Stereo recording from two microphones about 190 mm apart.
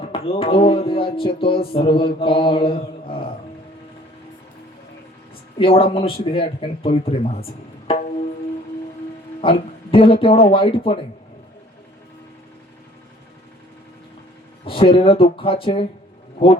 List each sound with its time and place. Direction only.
0.1 s speech: 30° left (ahead or behind)
5.5 s speech: 30° left (ahead or behind)
7.9 s music: 30° left (ahead or behind)
9.4 s speech: 30° left (ahead or behind)
14.6 s speech: 30° left (ahead or behind)